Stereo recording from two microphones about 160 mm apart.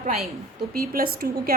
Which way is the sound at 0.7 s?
65° right (ahead or behind).